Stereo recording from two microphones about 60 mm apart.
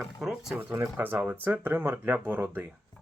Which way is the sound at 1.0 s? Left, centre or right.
Right.